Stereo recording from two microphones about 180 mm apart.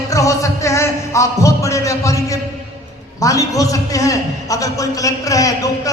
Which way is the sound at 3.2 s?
20° left (ahead or behind).